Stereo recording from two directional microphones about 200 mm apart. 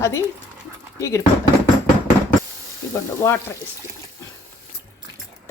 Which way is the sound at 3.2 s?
15° left (ahead or behind).